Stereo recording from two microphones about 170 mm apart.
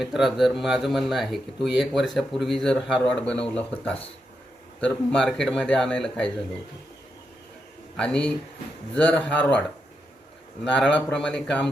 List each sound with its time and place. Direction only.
0.0 s speech: centre (ahead or behind)
7.9 s speech: 5° left (ahead or behind)